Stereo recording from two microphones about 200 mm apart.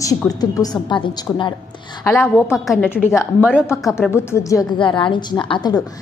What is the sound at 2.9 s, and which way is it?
Speech, 15° left (ahead or behind).